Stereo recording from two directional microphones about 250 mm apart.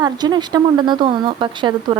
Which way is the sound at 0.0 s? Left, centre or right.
Centre.